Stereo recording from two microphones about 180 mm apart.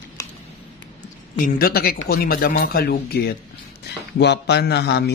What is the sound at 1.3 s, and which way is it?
Speech, 55° left (ahead or behind).